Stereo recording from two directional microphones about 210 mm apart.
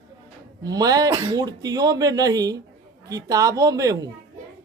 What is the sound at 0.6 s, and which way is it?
A woman's voice, 20° right (ahead or behind).